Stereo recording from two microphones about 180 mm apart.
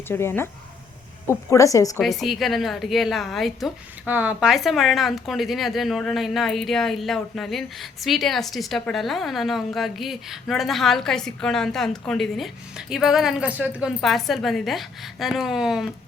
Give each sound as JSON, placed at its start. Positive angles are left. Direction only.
{"t": 0.1, "sound": "a woman's voice", "side_deg": 15}
{"t": 2.0, "sound": "a woman's voice", "side_deg": 0}